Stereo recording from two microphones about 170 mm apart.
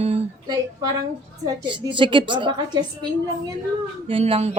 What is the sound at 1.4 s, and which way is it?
A woman's voice, 30° right (ahead or behind).